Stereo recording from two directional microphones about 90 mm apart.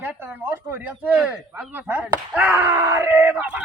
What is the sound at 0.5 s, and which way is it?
Speech, 25° right (ahead or behind).